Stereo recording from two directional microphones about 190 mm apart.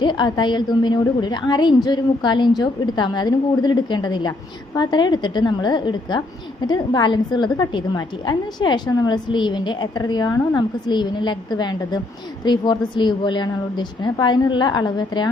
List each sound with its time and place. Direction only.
0.0 s a woman's voice: 25° left (ahead or behind)